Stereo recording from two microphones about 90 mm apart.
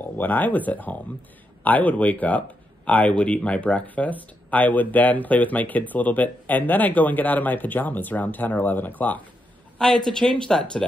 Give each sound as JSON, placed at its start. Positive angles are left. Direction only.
{"t": 0.2, "sound": "speech", "side_deg": 20}
{"t": 9.8, "sound": "speech", "side_deg": 5}